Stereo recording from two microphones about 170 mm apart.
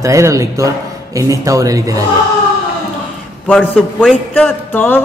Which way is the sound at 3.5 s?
5° left (ahead or behind).